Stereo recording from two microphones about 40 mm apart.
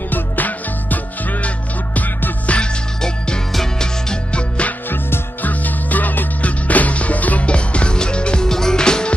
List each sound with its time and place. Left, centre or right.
0.1 s music: left
2.4 s music: left
3.8 s music: left
4.8 s music: left
5.5 s music: left
7.4 s music: left
8.5 s music: centre